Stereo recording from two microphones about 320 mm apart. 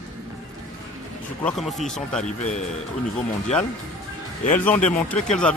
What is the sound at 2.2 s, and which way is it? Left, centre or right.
Speech, left.